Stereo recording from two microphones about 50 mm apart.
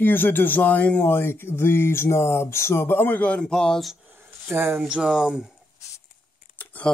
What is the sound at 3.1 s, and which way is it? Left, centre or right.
Speech, left.